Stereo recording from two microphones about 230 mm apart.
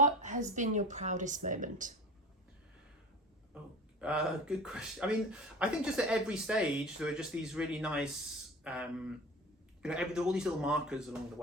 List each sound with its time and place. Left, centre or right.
0.0 s speech: right
4.0 s speech: centre